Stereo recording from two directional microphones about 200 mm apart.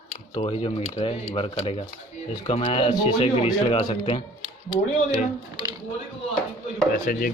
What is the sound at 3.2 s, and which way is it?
Speech, 30° left (ahead or behind).